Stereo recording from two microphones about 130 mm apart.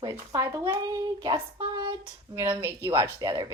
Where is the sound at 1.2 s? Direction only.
35° right (ahead or behind).